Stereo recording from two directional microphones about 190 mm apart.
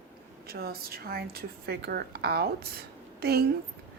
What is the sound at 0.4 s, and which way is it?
Speech, 55° right (ahead or behind).